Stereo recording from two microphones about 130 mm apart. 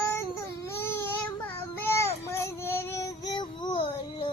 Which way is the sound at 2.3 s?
20° left (ahead or behind).